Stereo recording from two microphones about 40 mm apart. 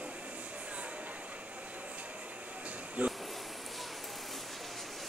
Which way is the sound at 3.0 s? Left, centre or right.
Right.